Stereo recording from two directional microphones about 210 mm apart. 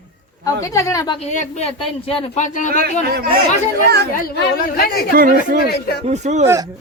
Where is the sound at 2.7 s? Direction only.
45° right (ahead or behind).